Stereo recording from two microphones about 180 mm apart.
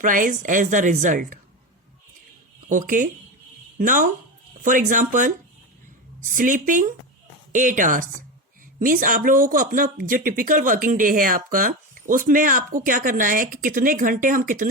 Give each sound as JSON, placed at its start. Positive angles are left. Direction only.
{"t": 0.0, "sound": "speech", "side_deg": -45}
{"t": 2.6, "sound": "speech", "side_deg": -45}